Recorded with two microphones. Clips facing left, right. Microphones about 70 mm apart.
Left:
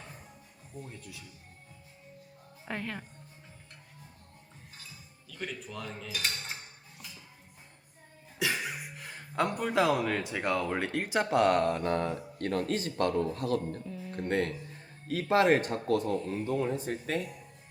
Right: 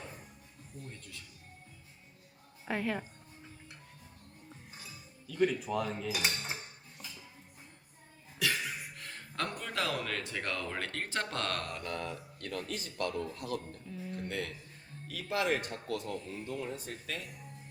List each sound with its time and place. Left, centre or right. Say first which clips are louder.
0.8 s speech: left 4 dB; centre
2.6 s a woman's voice: right 3 dB; centre
5.3 s cutlery: right 10 dB; centre
8.4 s speech: left 2 dB; centre; by 13.4 s left
13.8 s a sound: left 1 dB; centre
14.2 s a sound: left 9 dB; left
15.0 s speech: left 8 dB; left
16.7 s speech: left 9 dB; left